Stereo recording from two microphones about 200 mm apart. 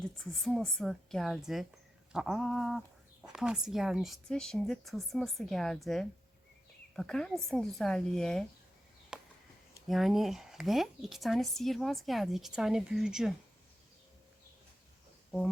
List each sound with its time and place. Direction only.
0.2 s speech: centre (ahead or behind)
9.1 s a sound: 5° right (ahead or behind)
9.8 s speech: centre (ahead or behind)